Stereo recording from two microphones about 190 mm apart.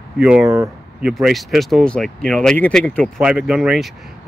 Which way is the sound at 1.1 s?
Centre (ahead or behind).